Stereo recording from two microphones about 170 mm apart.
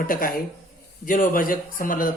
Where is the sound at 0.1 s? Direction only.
60° left (ahead or behind).